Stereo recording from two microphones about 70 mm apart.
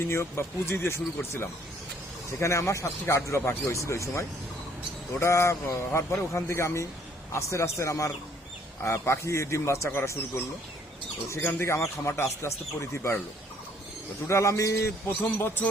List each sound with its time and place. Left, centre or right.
0.0 s a man's voice: left
14.3 s a man's voice: left